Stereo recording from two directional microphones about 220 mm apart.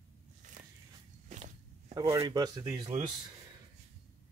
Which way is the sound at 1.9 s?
15° right (ahead or behind).